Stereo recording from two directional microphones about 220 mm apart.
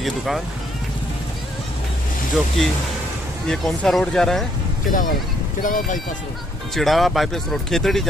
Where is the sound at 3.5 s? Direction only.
Centre (ahead or behind).